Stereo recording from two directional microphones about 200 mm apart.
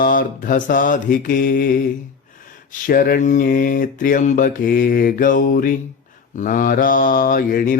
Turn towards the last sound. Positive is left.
turn(degrees=45)  # may be behind; listen again after turning